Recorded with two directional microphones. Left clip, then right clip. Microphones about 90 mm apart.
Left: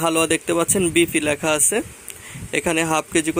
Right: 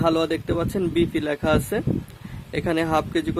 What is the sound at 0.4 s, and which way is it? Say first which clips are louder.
Speech: left 5 dB; 15° left (ahead or behind).